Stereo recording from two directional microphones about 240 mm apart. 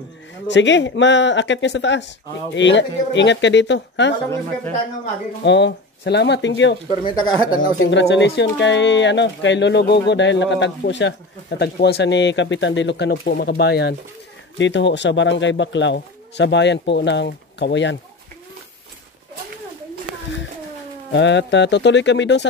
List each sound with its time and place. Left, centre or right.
0.5 s speech: left
5.4 s speech: left
7.1 s speech: centre
7.8 s speech: left
21.1 s speech: left